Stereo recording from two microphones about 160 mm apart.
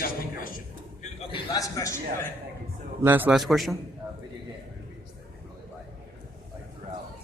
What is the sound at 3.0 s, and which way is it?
Speech, 10° right (ahead or behind).